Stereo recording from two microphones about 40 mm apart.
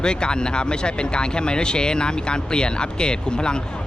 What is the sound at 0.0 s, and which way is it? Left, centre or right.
Speech, left.